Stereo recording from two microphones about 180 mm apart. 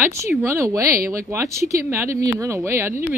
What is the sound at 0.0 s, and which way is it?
Speech, 15° right (ahead or behind).